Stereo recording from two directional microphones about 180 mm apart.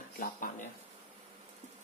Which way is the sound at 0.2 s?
50° left (ahead or behind).